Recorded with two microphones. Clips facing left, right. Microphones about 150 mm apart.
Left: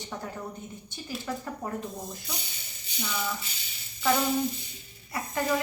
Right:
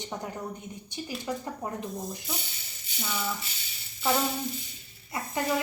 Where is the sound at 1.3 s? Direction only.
15° right (ahead or behind).